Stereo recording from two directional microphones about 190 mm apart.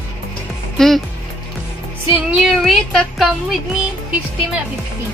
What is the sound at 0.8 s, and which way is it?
Speech, 5° left (ahead or behind).